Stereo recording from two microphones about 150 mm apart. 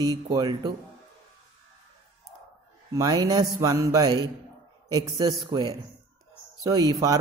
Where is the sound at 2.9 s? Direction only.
25° right (ahead or behind).